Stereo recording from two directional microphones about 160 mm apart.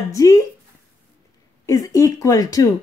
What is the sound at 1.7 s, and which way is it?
A woman's voice, 20° left (ahead or behind).